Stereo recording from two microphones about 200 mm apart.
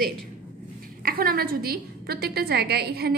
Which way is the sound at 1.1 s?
50° right (ahead or behind).